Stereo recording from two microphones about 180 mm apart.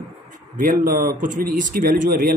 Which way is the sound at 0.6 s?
50° right (ahead or behind).